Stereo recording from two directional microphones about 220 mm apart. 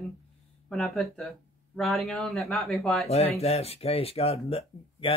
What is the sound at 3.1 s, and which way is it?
Speech, 30° left (ahead or behind).